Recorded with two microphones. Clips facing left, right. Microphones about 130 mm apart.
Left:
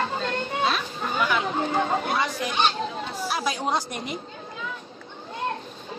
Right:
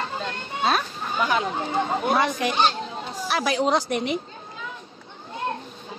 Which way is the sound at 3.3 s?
75° right (ahead or behind).